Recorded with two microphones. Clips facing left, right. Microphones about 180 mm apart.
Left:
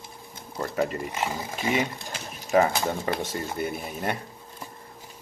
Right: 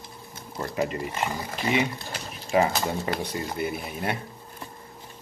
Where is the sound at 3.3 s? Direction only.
5° right (ahead or behind).